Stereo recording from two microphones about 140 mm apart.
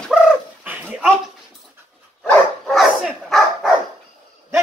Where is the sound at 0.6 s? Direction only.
10° right (ahead or behind).